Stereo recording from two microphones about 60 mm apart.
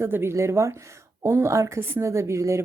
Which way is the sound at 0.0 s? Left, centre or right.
Right.